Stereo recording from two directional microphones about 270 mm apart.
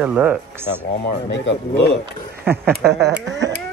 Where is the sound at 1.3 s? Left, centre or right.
Left.